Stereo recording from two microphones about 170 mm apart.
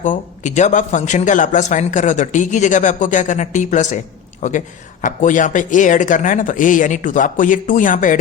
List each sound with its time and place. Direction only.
0.0 s speech: 45° left (ahead or behind)